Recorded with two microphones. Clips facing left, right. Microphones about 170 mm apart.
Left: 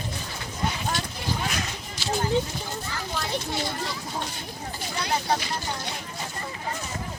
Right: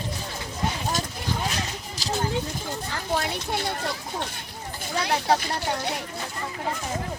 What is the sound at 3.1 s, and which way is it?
Children playing, 60° right (ahead or behind).